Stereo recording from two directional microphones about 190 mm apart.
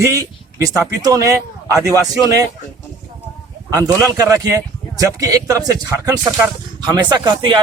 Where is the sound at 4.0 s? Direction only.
20° right (ahead or behind).